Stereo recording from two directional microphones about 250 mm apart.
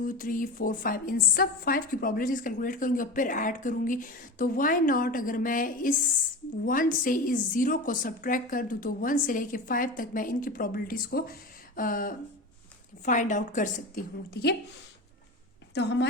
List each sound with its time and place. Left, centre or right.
0.0 s a woman's voice: left
15.7 s speech: left